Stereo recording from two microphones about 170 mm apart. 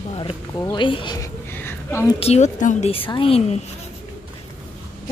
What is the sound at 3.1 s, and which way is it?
Speech, 30° left (ahead or behind).